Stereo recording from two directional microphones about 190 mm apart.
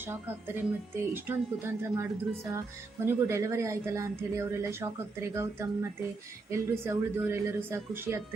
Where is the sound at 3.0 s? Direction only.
15° right (ahead or behind).